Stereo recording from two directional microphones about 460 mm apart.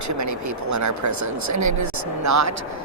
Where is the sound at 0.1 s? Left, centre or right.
Right.